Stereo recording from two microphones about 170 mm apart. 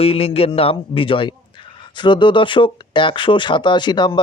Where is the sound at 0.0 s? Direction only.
35° left (ahead or behind).